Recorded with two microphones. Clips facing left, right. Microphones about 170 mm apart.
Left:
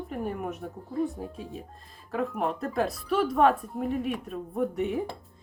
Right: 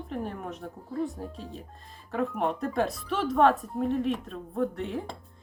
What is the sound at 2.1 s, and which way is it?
A woman's voice, 5° left (ahead or behind).